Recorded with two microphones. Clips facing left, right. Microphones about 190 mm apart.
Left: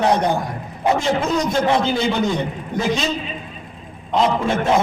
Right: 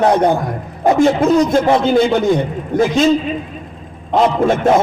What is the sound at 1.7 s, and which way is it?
Speech, 50° right (ahead or behind).